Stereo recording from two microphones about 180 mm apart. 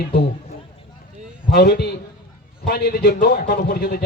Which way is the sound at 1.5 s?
65° left (ahead or behind).